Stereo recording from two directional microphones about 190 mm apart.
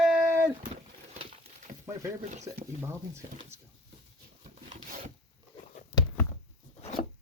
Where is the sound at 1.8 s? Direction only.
15° right (ahead or behind).